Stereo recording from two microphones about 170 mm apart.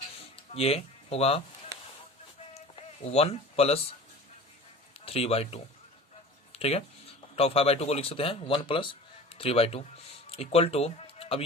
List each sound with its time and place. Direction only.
0.5 s speech: 35° left (ahead or behind)
2.6 s a sound: 40° left (ahead or behind)
4.9 s speech: 35° left (ahead or behind)